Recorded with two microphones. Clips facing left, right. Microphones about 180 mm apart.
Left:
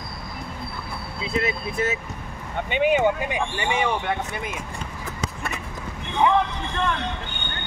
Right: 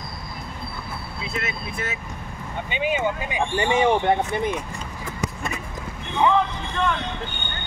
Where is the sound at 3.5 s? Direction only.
30° right (ahead or behind).